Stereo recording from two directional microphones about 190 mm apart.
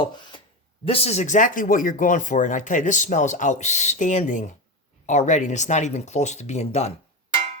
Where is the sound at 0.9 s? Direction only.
30° left (ahead or behind).